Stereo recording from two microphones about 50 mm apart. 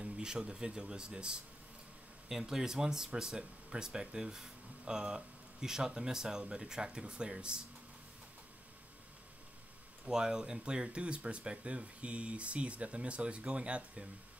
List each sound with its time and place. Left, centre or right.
0.0 s speech: centre
2.2 s speech: centre
10.0 s speech: centre